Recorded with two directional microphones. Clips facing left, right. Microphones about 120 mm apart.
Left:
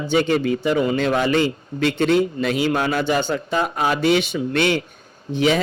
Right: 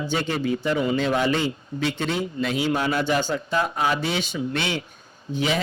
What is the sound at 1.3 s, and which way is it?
Speech, 65° left (ahead or behind).